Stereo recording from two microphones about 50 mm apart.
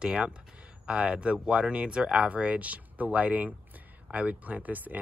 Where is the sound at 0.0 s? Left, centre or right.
Right.